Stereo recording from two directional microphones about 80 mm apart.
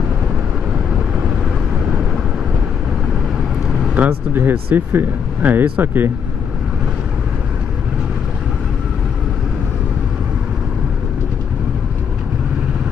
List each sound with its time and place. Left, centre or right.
3.9 s speech: right